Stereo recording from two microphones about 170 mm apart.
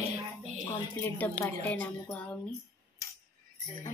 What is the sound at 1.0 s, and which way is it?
A woman's voice, 10° left (ahead or behind).